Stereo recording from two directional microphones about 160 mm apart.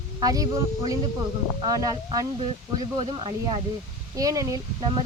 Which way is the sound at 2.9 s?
35° right (ahead or behind).